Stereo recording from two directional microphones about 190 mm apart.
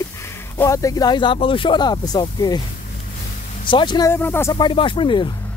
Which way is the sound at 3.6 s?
25° left (ahead or behind).